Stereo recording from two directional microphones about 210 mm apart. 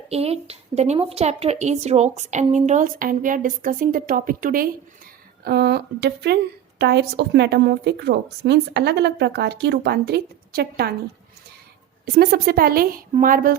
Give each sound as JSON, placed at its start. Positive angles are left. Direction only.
{"t": 0.1, "sound": "a woman's voice", "side_deg": -30}
{"t": 12.0, "sound": "a woman's voice", "side_deg": -50}